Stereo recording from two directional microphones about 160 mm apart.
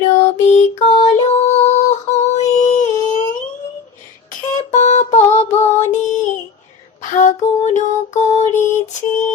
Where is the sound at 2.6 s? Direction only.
45° left (ahead or behind).